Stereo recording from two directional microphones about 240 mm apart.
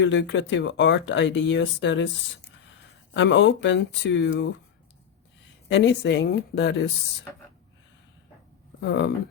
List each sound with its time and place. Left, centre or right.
0.0 s speech: left
5.6 s speech: left
8.8 s speech: left